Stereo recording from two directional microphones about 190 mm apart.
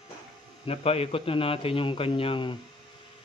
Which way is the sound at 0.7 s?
30° left (ahead or behind).